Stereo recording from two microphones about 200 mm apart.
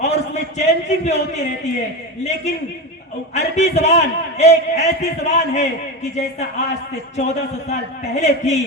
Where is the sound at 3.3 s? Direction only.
35° left (ahead or behind).